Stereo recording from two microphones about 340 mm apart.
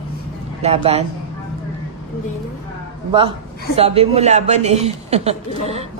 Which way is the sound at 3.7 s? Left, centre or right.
Centre.